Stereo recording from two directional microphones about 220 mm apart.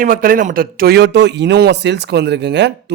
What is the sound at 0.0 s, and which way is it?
A man's voice, 40° right (ahead or behind).